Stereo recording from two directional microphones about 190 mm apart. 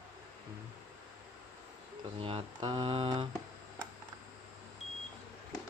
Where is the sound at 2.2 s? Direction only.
25° right (ahead or behind).